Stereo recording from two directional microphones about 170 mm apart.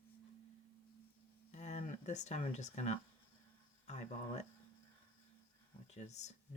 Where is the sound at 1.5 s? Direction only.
45° left (ahead or behind).